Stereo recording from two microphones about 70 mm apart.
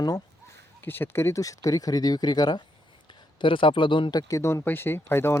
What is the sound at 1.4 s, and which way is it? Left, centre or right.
Speech, left.